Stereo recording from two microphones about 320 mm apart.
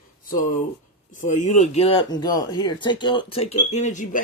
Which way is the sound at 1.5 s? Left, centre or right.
Left.